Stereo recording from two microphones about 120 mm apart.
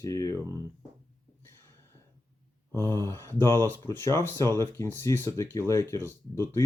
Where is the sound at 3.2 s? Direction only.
25° left (ahead or behind).